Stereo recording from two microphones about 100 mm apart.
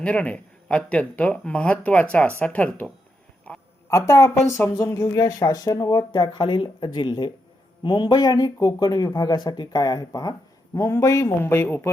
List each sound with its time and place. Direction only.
0.0 s speech: 10° left (ahead or behind)
3.5 s a sound: 15° left (ahead or behind)
3.8 s speech: 30° left (ahead or behind)